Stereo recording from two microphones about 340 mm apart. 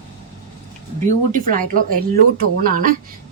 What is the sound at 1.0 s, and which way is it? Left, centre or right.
Speech, right.